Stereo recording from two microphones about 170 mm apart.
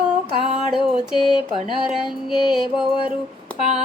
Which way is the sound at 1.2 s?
30° left (ahead or behind).